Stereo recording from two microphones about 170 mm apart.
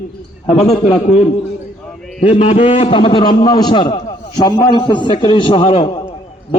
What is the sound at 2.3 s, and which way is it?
A man's voice, 40° left (ahead or behind).